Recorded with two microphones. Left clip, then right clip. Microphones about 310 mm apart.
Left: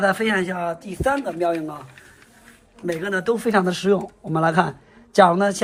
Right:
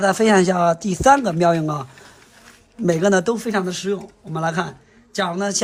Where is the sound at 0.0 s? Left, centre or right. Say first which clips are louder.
Right 4 dB; centre.